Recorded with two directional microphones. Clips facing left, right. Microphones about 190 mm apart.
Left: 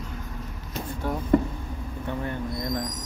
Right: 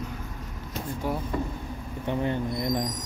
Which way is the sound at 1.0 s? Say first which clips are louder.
Left 7 dB; 10° right (ahead or behind).